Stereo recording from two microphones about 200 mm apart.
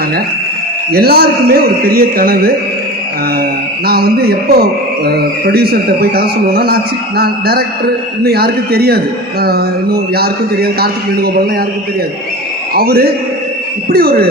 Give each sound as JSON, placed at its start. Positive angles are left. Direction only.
{"t": 0.9, "sound": "a man's voice", "side_deg": -50}
{"t": 3.8, "sound": "a man's voice", "side_deg": -50}
{"t": 12.7, "sound": "a man's voice", "side_deg": -50}